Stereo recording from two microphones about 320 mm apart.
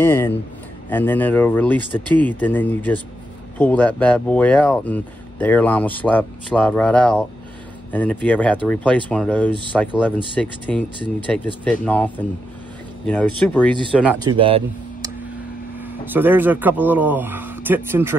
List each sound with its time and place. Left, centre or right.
0.0 s speech: centre
14.4 s speech: centre
15.9 s speech: centre